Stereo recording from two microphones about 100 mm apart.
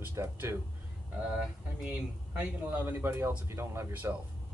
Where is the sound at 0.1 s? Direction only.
30° right (ahead or behind).